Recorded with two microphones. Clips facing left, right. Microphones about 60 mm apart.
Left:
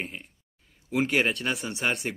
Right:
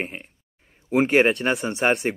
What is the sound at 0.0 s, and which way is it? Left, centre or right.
Speech, right.